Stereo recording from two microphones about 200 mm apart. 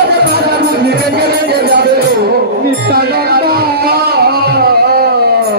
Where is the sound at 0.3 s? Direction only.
50° right (ahead or behind).